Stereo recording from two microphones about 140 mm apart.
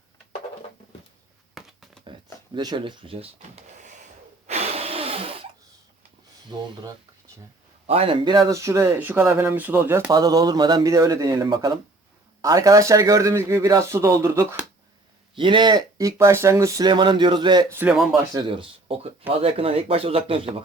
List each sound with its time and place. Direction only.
1.6 s a sound: centre (ahead or behind)
2.6 s speech: 30° right (ahead or behind)
3.8 s gasp: 60° right (ahead or behind)
4.4 s a sound: 50° right (ahead or behind)
6.5 s speech: 30° right (ahead or behind)
7.9 s speech: 40° right (ahead or behind)
8.5 s speech: 20° right (ahead or behind)
10.1 s speech: 25° right (ahead or behind)
15.4 s speech: 35° right (ahead or behind)
16.9 s speech: 35° right (ahead or behind)
17.7 s speech: 15° right (ahead or behind)
17.9 s speech: centre (ahead or behind)
18.3 s speech: 40° right (ahead or behind)